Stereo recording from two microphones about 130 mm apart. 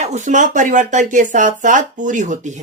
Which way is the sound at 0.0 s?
65° right (ahead or behind).